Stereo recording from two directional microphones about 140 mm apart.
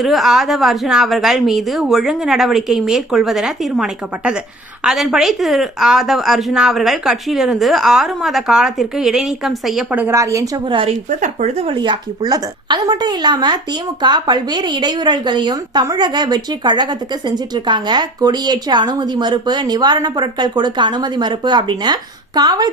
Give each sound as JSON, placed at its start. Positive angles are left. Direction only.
{"t": 0.0, "sound": "speech", "side_deg": 0}
{"t": 9.9, "sound": "a woman's voice", "side_deg": -15}
{"t": 11.2, "sound": "a woman's voice", "side_deg": -55}